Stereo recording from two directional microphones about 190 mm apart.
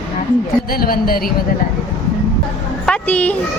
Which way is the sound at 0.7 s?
50° left (ahead or behind).